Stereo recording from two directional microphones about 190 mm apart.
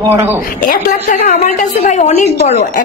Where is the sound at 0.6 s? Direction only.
45° left (ahead or behind).